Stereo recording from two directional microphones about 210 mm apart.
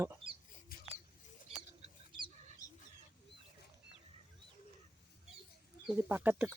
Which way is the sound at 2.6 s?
15° left (ahead or behind).